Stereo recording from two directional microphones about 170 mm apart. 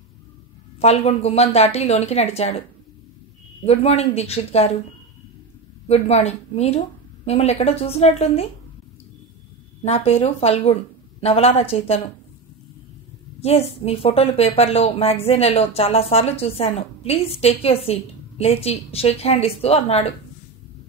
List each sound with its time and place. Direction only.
0.7 s a woman's voice: 40° left (ahead or behind)
3.6 s a woman's voice: 40° left (ahead or behind)
5.9 s a woman's voice: 40° left (ahead or behind)
9.8 s a woman's voice: 35° left (ahead or behind)
13.4 s a woman's voice: 35° left (ahead or behind)